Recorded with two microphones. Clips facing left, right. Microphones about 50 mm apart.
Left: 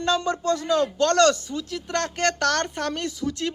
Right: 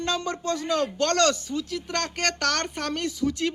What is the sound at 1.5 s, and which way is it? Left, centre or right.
Speech, centre.